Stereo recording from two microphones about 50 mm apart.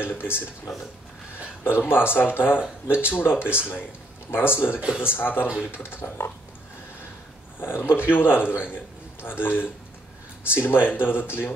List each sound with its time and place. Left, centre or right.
0.0 s speech: left
1.6 s speech: left
3.4 s speech: right
4.3 s speech: left
7.6 s speech: left